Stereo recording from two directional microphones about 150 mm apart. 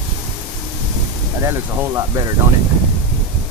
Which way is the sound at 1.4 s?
20° right (ahead or behind).